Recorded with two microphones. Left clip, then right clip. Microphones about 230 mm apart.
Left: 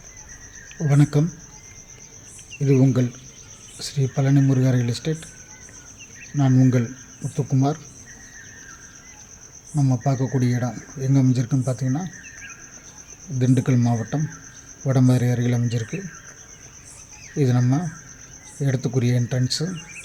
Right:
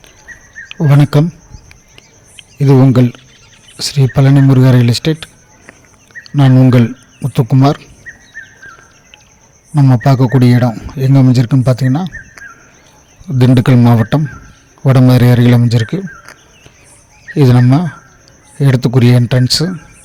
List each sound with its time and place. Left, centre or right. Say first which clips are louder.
0.7 s speech: right 9 dB; right
2.6 s a man's voice: right 10 dB; right
6.3 s a man's voice: right 10 dB; right
9.7 s a man's voice: right 12 dB; right
13.4 s a man's voice: right 12 dB; right
17.3 s a man's voice: right 12 dB; right